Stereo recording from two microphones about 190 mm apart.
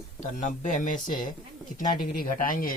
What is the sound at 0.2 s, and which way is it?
Speech, 40° left (ahead or behind).